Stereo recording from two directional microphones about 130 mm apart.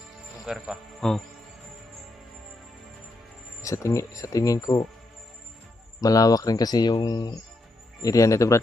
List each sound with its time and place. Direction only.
0.4 s a man's voice: 5° right (ahead or behind)
3.6 s speech: 25° left (ahead or behind)
6.0 s speech: 30° left (ahead or behind)